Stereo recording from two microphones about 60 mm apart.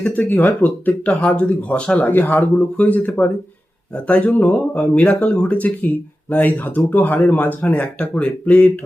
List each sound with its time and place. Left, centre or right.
0.1 s speech: left
2.0 s speech: left